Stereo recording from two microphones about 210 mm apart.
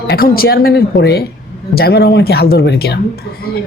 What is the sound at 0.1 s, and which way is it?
Speech, 45° left (ahead or behind).